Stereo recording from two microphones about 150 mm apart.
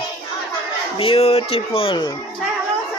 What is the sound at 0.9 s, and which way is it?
Speech, 40° left (ahead or behind).